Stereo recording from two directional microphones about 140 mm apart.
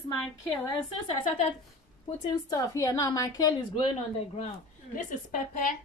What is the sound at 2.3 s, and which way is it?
A woman's voice, 25° left (ahead or behind).